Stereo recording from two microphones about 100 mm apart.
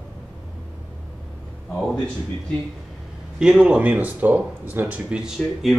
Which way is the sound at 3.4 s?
10° right (ahead or behind).